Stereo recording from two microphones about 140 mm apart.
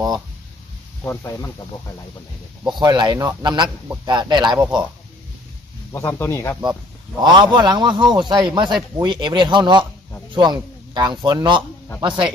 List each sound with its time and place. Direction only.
1.0 s speech: 20° left (ahead or behind)
2.6 s a man's voice: 30° right (ahead or behind)
5.9 s speech: 20° left (ahead or behind)
7.2 s a man's voice: 30° right (ahead or behind)